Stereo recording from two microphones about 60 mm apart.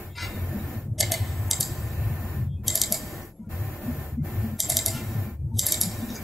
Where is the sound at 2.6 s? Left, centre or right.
Centre.